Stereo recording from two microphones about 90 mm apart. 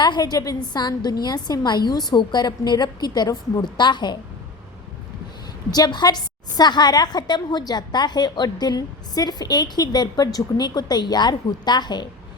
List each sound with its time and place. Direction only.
0.0 s a woman's voice: 55° left (ahead or behind)
3.6 s a woman's voice: 60° left (ahead or behind)
5.7 s a woman's voice: 50° left (ahead or behind)